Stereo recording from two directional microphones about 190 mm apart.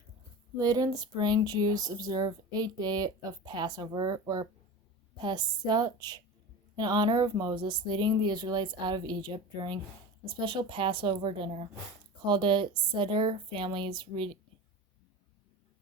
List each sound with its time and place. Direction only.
0.5 s speech: 20° right (ahead or behind)